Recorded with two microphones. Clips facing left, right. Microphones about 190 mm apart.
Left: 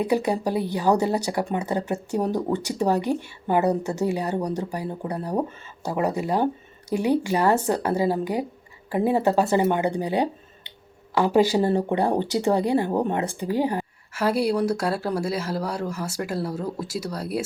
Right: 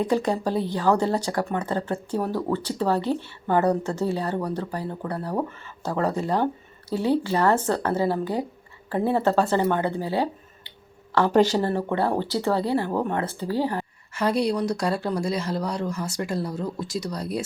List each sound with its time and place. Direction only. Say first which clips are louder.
0.0 s speech: left 1 dB; 10° left (ahead or behind)
14.1 s speech: left 1 dB; 5° left (ahead or behind)